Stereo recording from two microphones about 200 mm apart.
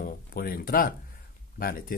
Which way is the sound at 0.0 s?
45° left (ahead or behind).